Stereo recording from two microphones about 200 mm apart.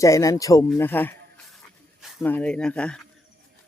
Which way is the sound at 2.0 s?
Centre (ahead or behind).